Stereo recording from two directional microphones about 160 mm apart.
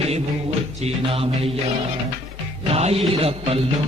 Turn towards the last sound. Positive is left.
turn(degrees=-35)  # may be behind; listen again after turning